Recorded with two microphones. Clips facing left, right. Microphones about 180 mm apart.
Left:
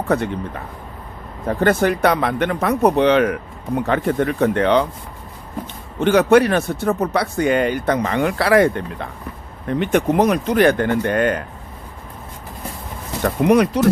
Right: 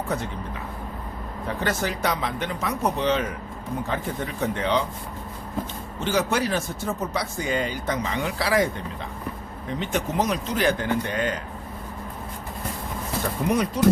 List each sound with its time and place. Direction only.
0.1 s speech: 65° left (ahead or behind)
6.0 s speech: 65° left (ahead or behind)
13.2 s speech: 70° left (ahead or behind)